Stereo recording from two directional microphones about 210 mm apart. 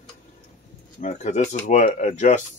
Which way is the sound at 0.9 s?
35° left (ahead or behind).